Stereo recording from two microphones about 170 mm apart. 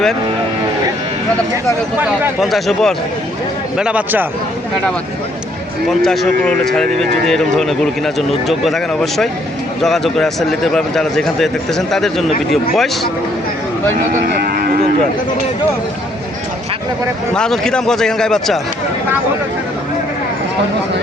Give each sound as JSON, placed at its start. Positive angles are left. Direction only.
{"t": 2.4, "sound": "speech", "side_deg": 0}
{"t": 6.0, "sound": "speech", "side_deg": 5}
{"t": 14.3, "sound": "moo", "side_deg": -60}
{"t": 17.3, "sound": "speech", "side_deg": 5}